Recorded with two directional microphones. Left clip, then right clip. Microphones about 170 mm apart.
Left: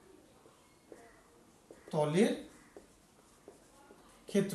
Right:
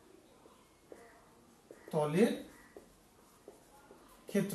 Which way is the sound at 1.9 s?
15° left (ahead or behind).